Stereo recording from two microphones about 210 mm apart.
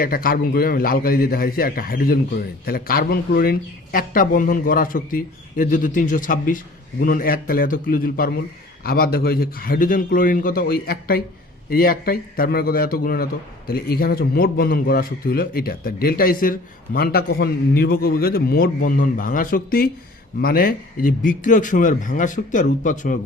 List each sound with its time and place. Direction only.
0.0 s a man's voice: 45° left (ahead or behind)